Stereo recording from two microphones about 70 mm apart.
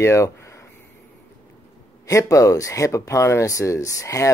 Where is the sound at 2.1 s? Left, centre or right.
Left.